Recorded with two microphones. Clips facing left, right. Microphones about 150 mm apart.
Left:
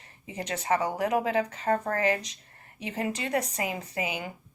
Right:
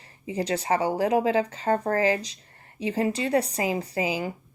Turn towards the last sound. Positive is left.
turn(degrees=-30)  # may be behind; listen again after turning